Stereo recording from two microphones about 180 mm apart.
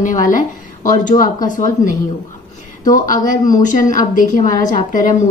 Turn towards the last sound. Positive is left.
turn(degrees=45)  # may be behind; listen again after turning